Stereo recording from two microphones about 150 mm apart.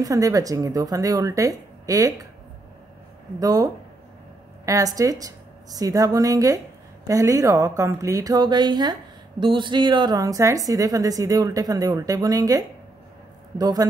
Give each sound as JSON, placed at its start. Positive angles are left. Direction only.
{"t": 0.0, "sound": "a woman's voice", "side_deg": -25}
{"t": 3.3, "sound": "a woman's voice", "side_deg": -25}